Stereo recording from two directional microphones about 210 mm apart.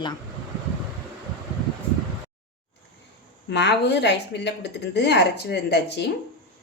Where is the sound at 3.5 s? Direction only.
55° left (ahead or behind).